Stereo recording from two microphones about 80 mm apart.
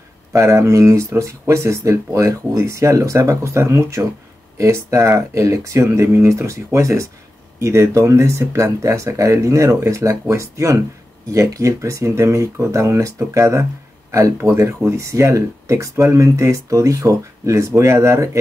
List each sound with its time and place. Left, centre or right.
0.3 s speech: right